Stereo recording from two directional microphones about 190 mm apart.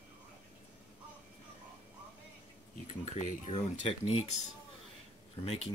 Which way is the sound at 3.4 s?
35° left (ahead or behind).